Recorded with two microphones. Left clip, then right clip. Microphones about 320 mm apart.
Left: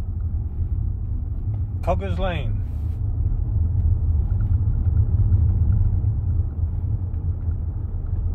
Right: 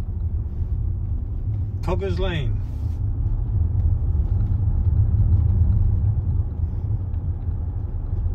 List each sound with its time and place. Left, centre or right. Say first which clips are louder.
1.9 s speech: left 2 dB; centre